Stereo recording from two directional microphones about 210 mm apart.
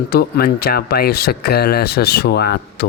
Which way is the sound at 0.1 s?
45° left (ahead or behind).